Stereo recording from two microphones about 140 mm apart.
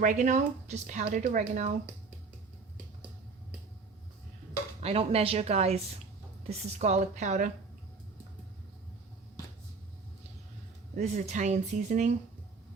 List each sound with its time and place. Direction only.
0.0 s speech: 60° right (ahead or behind)
4.8 s a woman's voice: 45° right (ahead or behind)
10.9 s speech: 55° right (ahead or behind)